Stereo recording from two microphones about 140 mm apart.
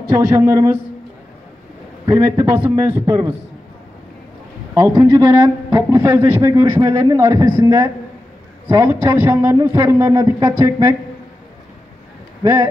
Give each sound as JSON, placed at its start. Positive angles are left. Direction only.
{"t": 0.1, "sound": "a man's voice", "side_deg": -20}
{"t": 2.0, "sound": "a man's voice", "side_deg": -20}
{"t": 4.7, "sound": "a man's voice", "side_deg": -25}